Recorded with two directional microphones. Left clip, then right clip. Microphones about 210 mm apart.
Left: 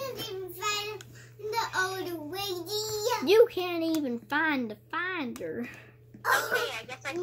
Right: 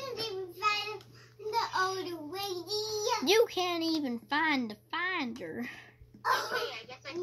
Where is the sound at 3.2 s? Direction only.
25° right (ahead or behind).